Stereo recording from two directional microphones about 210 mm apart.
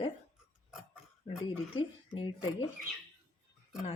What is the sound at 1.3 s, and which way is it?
Speech, 25° left (ahead or behind).